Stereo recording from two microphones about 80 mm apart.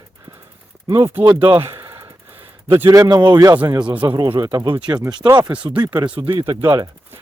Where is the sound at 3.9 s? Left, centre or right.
Right.